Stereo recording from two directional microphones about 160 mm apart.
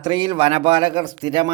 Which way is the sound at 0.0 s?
30° right (ahead or behind).